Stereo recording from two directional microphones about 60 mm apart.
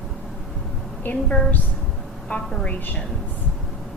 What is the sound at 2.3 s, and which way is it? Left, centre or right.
Speech, centre.